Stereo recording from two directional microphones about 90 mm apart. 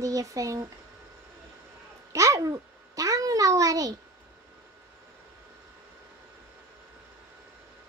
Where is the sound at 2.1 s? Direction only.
35° right (ahead or behind).